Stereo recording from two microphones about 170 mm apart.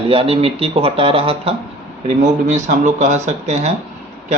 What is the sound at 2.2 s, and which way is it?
Speech, 45° right (ahead or behind).